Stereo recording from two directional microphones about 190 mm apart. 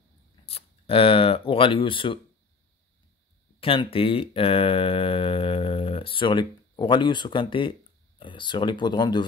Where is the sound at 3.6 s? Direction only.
30° left (ahead or behind).